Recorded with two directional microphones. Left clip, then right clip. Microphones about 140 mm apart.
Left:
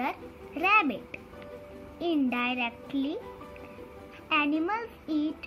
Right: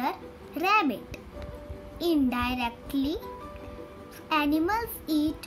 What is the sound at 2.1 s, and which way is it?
Child singing, 30° right (ahead or behind).